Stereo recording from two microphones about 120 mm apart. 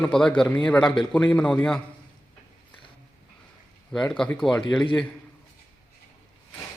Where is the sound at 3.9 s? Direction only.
5° left (ahead or behind).